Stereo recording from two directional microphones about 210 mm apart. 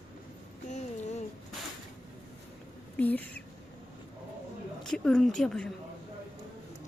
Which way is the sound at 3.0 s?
10° left (ahead or behind).